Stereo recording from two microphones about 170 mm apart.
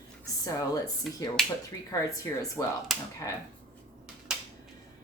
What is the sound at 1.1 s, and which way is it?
Speech, centre (ahead or behind).